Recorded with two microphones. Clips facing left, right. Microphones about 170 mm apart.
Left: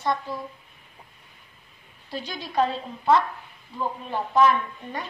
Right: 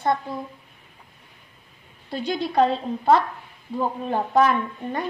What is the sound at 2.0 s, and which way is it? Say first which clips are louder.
Speech: right 8 dB; 60° right (ahead or behind).